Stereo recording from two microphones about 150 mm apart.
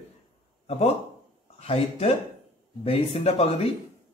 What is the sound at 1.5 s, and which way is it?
A man's voice, 40° left (ahead or behind).